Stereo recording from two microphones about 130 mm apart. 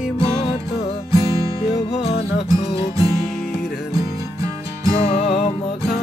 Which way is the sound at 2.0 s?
50° left (ahead or behind).